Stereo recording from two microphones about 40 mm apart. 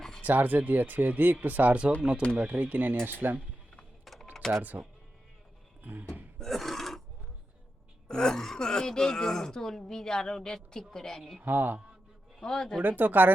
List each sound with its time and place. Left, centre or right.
0.2 s speech: right
2.3 s speech: right
4.0 s typing: centre
4.7 s speech: right
6.4 s a sound: centre
8.0 s speech: centre
11.4 s speech: right
12.4 s speech: centre
12.8 s speech: right